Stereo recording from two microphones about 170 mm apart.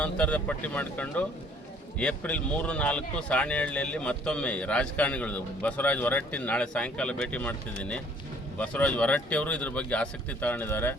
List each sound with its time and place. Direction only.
0.0 s speech: 10° left (ahead or behind)